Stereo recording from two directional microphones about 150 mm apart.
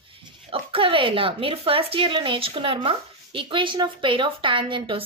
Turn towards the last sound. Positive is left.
turn(degrees=-35)  # may be behind; listen again after turning